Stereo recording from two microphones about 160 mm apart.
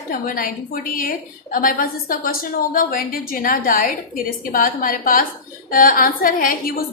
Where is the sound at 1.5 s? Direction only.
60° left (ahead or behind).